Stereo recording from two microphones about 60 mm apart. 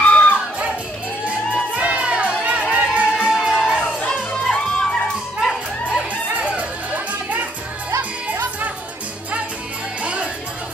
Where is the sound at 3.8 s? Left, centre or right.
Centre.